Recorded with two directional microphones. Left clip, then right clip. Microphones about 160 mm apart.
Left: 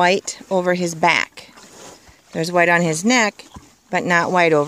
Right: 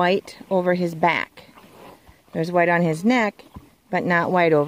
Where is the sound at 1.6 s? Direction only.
65° left (ahead or behind).